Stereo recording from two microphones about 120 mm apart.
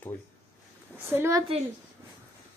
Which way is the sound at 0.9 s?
20° right (ahead or behind).